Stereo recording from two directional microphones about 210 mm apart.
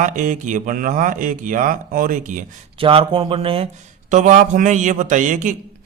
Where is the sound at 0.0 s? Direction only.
35° right (ahead or behind).